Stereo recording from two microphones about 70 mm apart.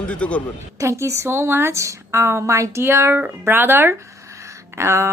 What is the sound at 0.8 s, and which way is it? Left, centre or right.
A woman's voice, right.